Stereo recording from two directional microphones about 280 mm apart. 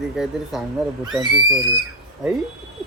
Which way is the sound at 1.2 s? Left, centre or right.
Centre.